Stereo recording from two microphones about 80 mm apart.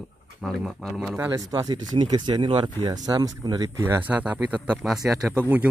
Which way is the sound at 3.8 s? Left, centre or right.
Right.